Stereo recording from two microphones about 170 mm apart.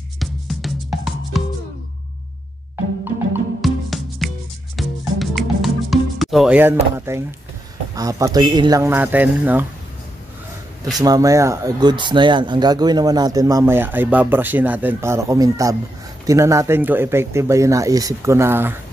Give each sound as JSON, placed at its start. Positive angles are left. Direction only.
{"t": 0.2, "sound": "music", "side_deg": 0}
{"t": 3.6, "sound": "music", "side_deg": 0}
{"t": 7.9, "sound": "speech", "side_deg": -20}
{"t": 10.9, "sound": "speech", "side_deg": -20}